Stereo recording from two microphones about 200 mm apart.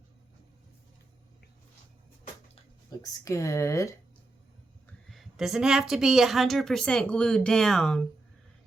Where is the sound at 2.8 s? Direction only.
15° left (ahead or behind).